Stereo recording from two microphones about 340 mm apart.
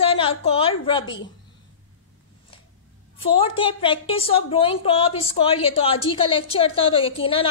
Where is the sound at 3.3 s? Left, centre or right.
Centre.